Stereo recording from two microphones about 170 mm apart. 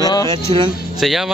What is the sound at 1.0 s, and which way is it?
Speech, centre (ahead or behind).